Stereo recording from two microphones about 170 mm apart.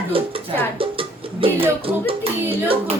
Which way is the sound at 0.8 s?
30° right (ahead or behind).